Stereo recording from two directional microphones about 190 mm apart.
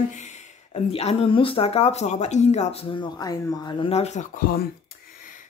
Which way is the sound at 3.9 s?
35° left (ahead or behind).